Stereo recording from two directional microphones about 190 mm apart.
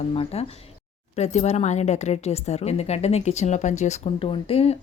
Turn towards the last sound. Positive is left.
turn(degrees=30)  # may be behind; listen again after turning